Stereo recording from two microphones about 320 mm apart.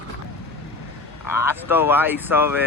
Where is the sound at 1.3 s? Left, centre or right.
Centre.